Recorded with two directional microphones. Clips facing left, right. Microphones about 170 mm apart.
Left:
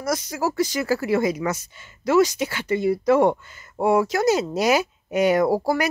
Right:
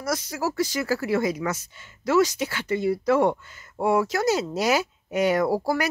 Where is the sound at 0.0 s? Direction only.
15° left (ahead or behind).